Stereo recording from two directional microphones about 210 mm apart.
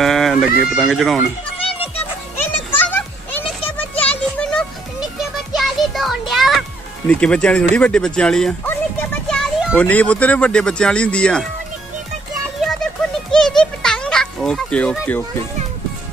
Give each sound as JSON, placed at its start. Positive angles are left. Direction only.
{"t": 0.0, "sound": "speech", "side_deg": 0}
{"t": 1.6, "sound": "music", "side_deg": 25}
{"t": 3.7, "sound": "music", "side_deg": 5}
{"t": 7.1, "sound": "speech", "side_deg": 5}
{"t": 7.7, "sound": "music", "side_deg": 5}
{"t": 9.8, "sound": "speech", "side_deg": 5}
{"t": 12.6, "sound": "a sound", "side_deg": 5}